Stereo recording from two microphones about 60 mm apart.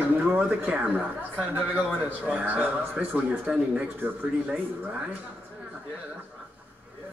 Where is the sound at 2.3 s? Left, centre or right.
Right.